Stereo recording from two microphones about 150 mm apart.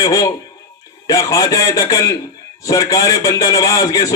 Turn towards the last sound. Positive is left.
turn(degrees=25)  # may be behind; listen again after turning